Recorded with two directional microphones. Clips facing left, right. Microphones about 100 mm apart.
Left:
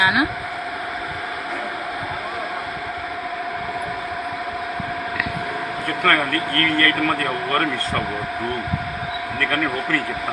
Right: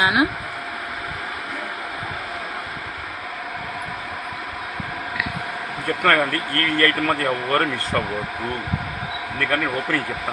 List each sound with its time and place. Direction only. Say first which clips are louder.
0.0 s speech: even; 25° right (ahead or behind)
6.1 s speech: even; 25° right (ahead or behind)
9.4 s speech: even; 20° right (ahead or behind)